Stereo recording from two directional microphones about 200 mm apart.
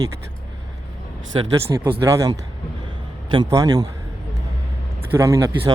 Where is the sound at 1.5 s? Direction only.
15° right (ahead or behind).